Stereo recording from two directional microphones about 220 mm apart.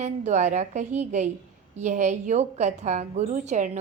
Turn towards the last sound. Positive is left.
turn(degrees=-35)  # may be behind; listen again after turning